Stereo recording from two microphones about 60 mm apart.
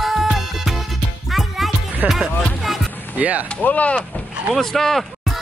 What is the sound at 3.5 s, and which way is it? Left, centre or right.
Speech, left.